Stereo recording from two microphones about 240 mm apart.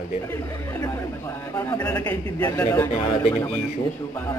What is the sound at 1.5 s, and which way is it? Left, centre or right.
A man's voice, centre.